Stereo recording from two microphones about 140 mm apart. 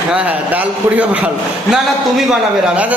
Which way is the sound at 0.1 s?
10° right (ahead or behind).